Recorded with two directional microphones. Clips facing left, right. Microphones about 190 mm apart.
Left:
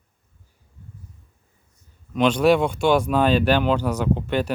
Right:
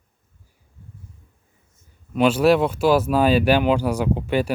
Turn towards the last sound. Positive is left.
turn(degrees=-10)  # may be behind; listen again after turning